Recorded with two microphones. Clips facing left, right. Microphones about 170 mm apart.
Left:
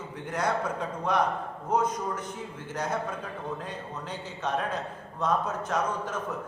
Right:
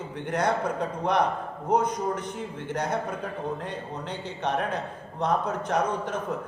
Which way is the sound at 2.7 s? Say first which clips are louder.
Right 2 dB; 65° right (ahead or behind).